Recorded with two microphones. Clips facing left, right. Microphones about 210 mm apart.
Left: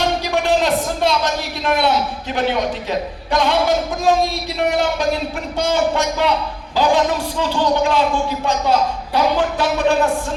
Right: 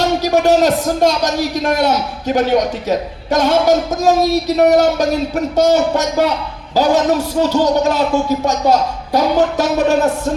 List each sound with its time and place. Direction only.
0.2 s a man's voice: 40° right (ahead or behind)